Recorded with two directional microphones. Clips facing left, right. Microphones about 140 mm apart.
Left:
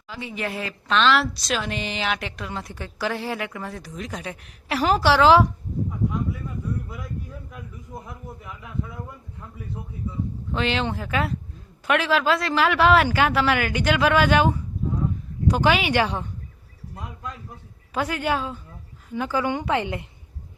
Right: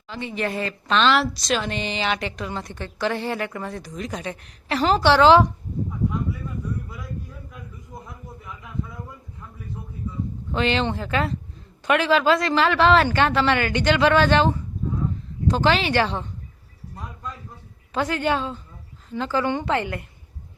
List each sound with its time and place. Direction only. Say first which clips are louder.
0.1 s a woman's voice: right 3 dB; 5° left (ahead or behind)
7.9 s a sound: left 2 dB; centre (ahead or behind)
10.5 s a woman's voice: right 3 dB; centre (ahead or behind)
17.9 s a woman's voice: right 2 dB; 5° left (ahead or behind)